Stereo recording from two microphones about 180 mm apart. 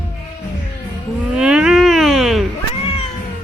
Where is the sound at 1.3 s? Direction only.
5° right (ahead or behind).